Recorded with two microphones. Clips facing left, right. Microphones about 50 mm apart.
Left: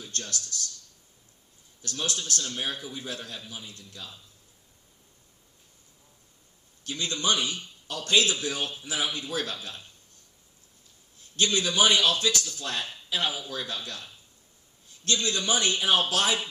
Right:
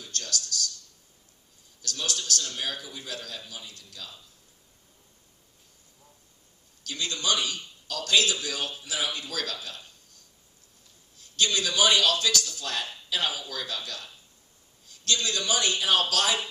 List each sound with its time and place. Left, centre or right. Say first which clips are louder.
0.1 s speech: right 4 dB; left
1.8 s a man's voice: left 1 dB; left
6.8 s a man's voice: left 1 dB; left
11.3 s a man's voice: left 1 dB; left